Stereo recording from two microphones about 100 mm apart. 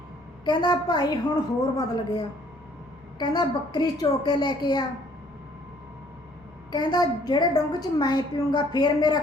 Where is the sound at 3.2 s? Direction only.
45° left (ahead or behind).